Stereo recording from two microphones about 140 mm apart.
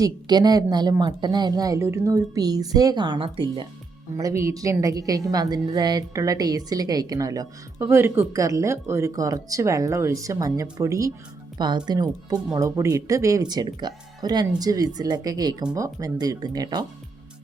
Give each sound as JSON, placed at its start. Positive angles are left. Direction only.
{"t": 0.0, "sound": "a woman's voice", "side_deg": -30}
{"t": 4.2, "sound": "a woman's voice", "side_deg": -25}